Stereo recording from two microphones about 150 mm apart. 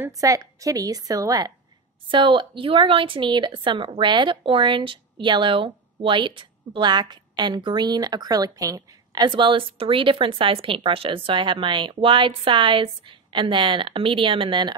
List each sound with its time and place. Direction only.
0.0 s a woman's voice: 20° right (ahead or behind)